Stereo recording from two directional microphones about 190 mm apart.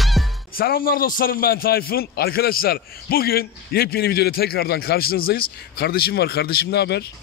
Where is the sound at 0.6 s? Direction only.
50° left (ahead or behind).